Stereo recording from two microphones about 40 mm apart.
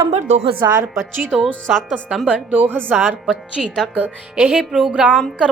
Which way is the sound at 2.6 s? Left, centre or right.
Right.